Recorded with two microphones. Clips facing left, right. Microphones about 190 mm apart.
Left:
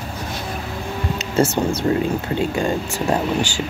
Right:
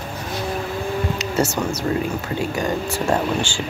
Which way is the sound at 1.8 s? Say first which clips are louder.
Left 3 dB; 25° left (ahead or behind).